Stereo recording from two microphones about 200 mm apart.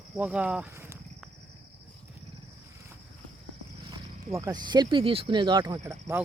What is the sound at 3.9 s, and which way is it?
Speech, 15° right (ahead or behind).